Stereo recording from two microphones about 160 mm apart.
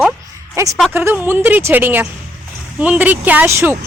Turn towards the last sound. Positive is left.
turn(degrees=-15)  # may be behind; listen again after turning